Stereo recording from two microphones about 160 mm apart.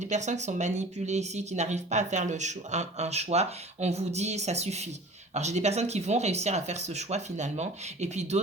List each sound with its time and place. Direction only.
0.0 s speech: 45° right (ahead or behind)